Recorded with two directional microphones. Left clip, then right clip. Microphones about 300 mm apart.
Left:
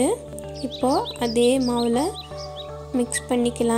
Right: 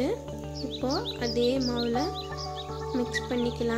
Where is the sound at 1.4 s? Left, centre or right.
Centre.